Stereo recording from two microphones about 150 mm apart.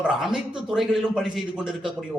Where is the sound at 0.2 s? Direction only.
5° right (ahead or behind).